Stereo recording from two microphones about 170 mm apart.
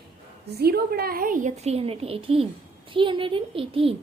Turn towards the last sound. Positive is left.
turn(degrees=-35)  # may be behind; listen again after turning